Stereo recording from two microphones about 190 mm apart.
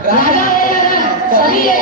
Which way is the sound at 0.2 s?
45° left (ahead or behind).